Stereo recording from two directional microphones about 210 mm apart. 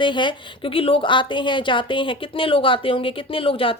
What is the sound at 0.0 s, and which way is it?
A woman's voice, 20° left (ahead or behind).